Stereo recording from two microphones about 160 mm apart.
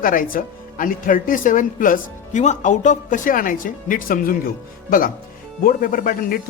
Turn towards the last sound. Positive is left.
turn(degrees=60)  # may be behind; listen again after turning